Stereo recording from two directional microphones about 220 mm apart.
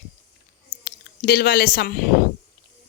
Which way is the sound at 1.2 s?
45° left (ahead or behind).